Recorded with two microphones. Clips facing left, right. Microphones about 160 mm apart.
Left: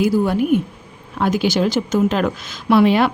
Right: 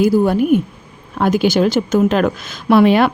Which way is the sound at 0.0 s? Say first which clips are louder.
Right 3 dB; 45° right (ahead or behind).